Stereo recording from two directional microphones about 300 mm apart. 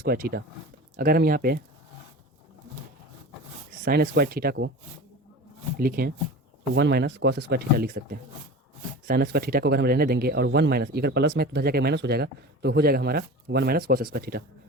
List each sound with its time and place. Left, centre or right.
0.1 s speech: right
3.8 s speech: right
5.7 s speech: right
9.0 s speech: right